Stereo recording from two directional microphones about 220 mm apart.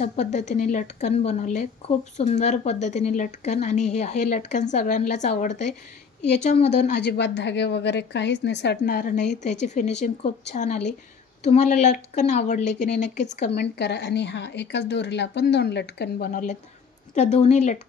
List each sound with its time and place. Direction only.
0.0 s a woman's voice: 30° left (ahead or behind)
6.8 s a woman's voice: 50° left (ahead or behind); by 13.6 s 35° left (ahead or behind)
13.6 s a woman's voice: 50° left (ahead or behind); by 17.7 s 30° left (ahead or behind)